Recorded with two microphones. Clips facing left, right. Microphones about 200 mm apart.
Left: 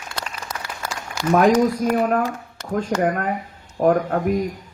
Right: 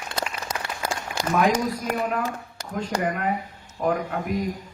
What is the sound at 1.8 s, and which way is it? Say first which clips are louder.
Speech: left 7 dB; 45° left (ahead or behind).